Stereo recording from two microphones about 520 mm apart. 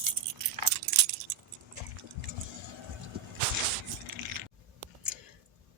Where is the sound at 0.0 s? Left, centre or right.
Right.